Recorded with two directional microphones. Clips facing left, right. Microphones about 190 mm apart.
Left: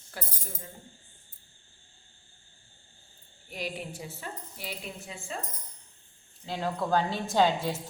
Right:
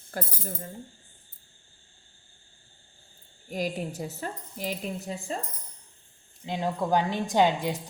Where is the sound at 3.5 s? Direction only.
40° right (ahead or behind).